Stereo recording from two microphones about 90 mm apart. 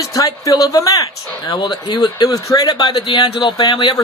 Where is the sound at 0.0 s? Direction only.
40° left (ahead or behind).